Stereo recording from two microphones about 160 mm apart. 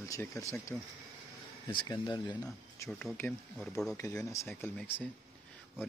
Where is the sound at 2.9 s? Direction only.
5° left (ahead or behind).